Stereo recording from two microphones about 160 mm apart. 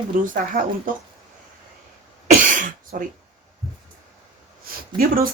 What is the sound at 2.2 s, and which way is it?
Cough, 55° right (ahead or behind).